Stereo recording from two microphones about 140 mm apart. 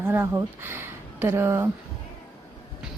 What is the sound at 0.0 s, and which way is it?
Speech, 15° right (ahead or behind).